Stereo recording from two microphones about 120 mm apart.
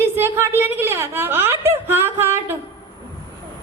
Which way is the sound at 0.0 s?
20° right (ahead or behind).